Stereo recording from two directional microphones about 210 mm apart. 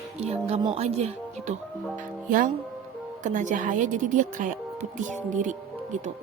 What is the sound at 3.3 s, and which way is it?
Speech, 35° right (ahead or behind).